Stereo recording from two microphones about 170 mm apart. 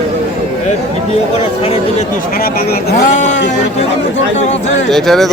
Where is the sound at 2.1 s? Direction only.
60° left (ahead or behind).